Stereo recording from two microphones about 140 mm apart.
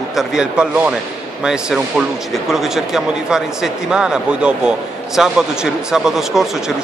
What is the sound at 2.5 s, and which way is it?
Speech, 5° right (ahead or behind).